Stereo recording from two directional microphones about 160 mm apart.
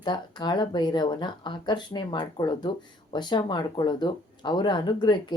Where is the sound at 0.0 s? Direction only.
25° left (ahead or behind).